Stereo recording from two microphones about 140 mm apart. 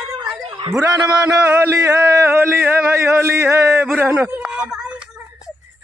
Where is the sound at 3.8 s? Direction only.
10° right (ahead or behind).